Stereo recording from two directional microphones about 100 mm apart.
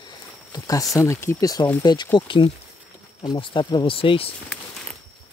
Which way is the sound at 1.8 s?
45° left (ahead or behind).